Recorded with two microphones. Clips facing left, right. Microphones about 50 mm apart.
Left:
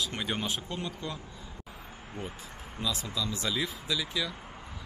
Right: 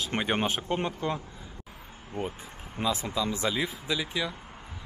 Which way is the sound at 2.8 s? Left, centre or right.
Right.